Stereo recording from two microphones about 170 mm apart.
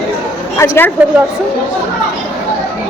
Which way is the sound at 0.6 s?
15° left (ahead or behind).